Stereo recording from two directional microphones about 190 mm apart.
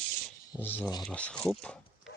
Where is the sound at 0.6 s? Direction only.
10° left (ahead or behind).